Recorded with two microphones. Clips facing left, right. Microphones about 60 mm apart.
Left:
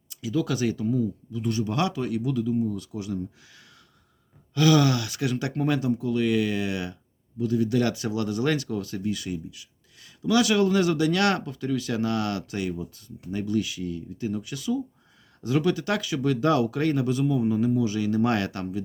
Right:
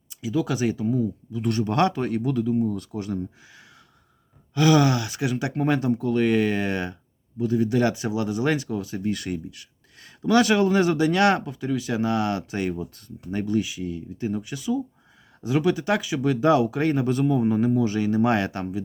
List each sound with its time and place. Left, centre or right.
0.1 s speech: right
1.4 s speech: right
4.5 s speech: right
5.6 s a man's voice: right
5.9 s speech: right; by 9.0 s centre
9.0 s speech: right
12.5 s speech: right
13.6 s speech: right
17.1 s a man's voice: right
18.1 s speech: right